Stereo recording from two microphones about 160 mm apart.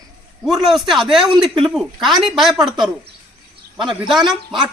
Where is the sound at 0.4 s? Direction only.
Centre (ahead or behind).